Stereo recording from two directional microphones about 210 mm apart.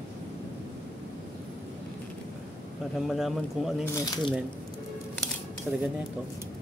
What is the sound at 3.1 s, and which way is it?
Speech, centre (ahead or behind).